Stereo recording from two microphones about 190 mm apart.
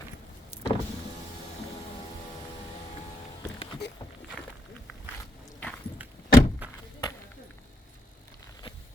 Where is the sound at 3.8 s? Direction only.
65° left (ahead or behind).